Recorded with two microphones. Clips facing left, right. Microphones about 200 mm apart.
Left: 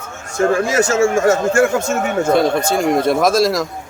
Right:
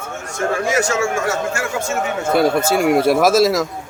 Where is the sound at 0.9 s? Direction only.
40° left (ahead or behind).